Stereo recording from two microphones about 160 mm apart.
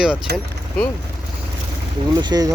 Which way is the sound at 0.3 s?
90° right.